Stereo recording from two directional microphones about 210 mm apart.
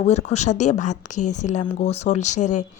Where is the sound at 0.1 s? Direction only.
30° left (ahead or behind).